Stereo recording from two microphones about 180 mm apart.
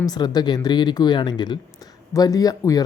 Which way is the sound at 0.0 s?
20° left (ahead or behind).